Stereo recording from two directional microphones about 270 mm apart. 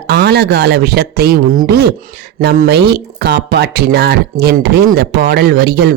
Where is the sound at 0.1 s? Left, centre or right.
Right.